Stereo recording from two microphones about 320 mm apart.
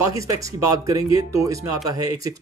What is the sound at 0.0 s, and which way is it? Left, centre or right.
Speech, centre.